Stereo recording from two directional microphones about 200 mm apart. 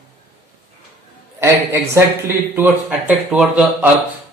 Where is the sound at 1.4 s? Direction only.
15° right (ahead or behind).